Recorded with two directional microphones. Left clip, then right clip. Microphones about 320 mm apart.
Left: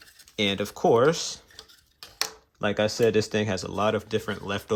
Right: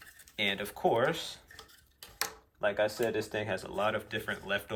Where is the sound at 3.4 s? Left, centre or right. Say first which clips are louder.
Left 6 dB; centre.